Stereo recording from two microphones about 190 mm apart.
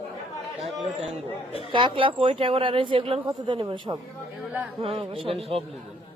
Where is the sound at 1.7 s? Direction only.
25° right (ahead or behind).